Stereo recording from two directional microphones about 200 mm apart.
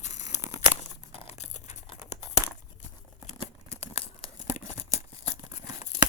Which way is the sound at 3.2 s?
30° left (ahead or behind).